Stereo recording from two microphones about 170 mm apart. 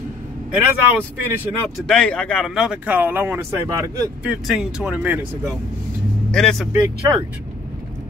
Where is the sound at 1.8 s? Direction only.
5° left (ahead or behind); by 4.3 s 15° right (ahead or behind).